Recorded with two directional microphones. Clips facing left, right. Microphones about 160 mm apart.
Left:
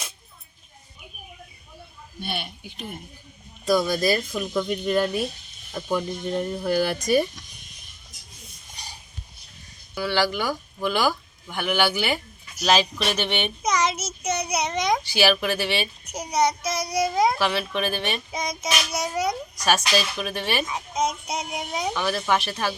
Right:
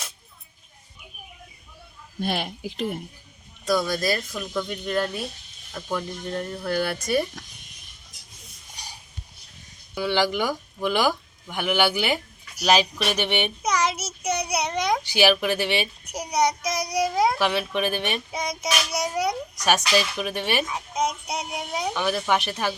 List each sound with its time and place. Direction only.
2.2 s speech: 90° right
3.7 s speech: 5° left (ahead or behind)
8.8 s a sound: 10° right (ahead or behind)
9.9 s a child's voice: 20° right (ahead or behind)